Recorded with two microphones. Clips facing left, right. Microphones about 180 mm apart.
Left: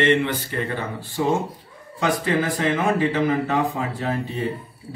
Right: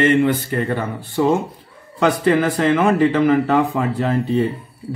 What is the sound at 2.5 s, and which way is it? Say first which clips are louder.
A man's voice: right 6 dB; 65° right (ahead or behind).